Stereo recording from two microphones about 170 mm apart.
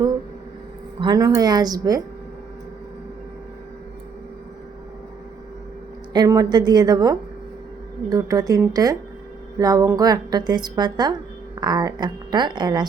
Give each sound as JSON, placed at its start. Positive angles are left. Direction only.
{"t": 0.9, "sound": "a woman's voice", "side_deg": -25}
{"t": 6.1, "sound": "a woman's voice", "side_deg": -20}